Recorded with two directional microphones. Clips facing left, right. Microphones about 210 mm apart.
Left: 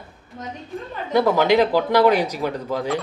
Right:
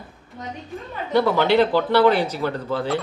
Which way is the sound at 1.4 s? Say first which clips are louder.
Left 1 dB; 10° left (ahead or behind).